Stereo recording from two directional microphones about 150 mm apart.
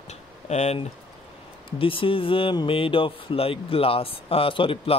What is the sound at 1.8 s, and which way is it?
Speech, 35° left (ahead or behind).